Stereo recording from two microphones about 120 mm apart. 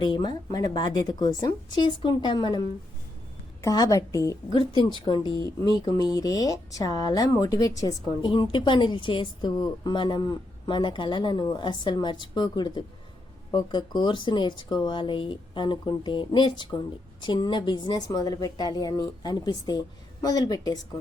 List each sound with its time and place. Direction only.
0.0 s speech: 40° left (ahead or behind)
8.3 s speech: 40° left (ahead or behind)